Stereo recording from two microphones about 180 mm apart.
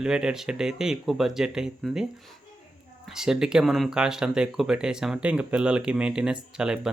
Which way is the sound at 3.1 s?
5° right (ahead or behind).